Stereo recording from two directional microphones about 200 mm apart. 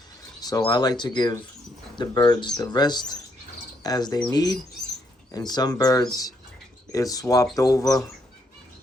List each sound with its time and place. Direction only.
0.4 s speech: 20° left (ahead or behind)